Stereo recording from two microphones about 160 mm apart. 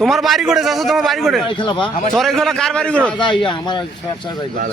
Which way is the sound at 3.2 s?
30° left (ahead or behind).